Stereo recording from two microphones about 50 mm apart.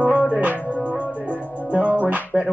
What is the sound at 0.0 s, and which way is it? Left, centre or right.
Music, right.